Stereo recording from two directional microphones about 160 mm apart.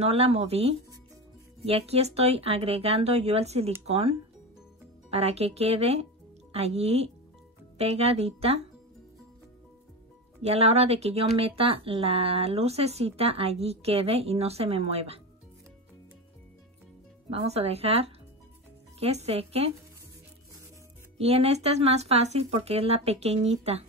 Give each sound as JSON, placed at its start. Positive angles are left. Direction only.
{"t": 0.0, "sound": "speech", "side_deg": -40}
{"t": 10.4, "sound": "speech", "side_deg": -40}
{"t": 17.3, "sound": "speech", "side_deg": -40}
{"t": 21.2, "sound": "speech", "side_deg": -40}